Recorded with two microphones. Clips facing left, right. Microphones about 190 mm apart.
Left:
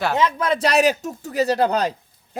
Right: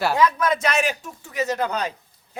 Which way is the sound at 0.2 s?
25° left (ahead or behind).